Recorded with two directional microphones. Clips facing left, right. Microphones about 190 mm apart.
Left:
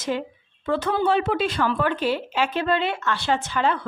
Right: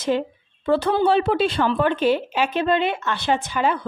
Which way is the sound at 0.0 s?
30° right (ahead or behind).